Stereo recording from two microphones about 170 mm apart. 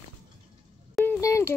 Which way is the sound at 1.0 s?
15° left (ahead or behind).